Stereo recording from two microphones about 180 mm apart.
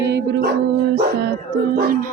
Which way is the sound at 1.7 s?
55° right (ahead or behind).